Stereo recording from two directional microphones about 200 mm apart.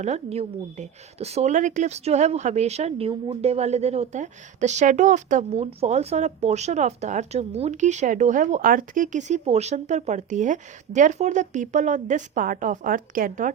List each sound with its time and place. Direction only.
0.0 s a woman's voice: 35° right (ahead or behind)